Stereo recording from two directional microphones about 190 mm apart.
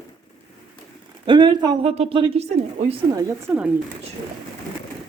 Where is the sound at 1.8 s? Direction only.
35° right (ahead or behind).